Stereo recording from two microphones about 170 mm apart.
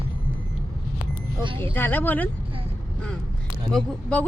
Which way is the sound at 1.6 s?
10° left (ahead or behind).